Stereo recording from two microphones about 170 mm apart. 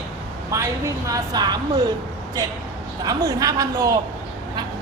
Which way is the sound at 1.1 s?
25° right (ahead or behind).